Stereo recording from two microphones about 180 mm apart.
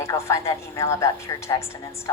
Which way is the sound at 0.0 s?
15° left (ahead or behind).